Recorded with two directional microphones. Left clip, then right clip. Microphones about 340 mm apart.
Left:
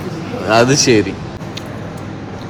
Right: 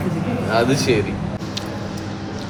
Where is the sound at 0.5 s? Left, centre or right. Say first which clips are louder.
Left 7 dB; left.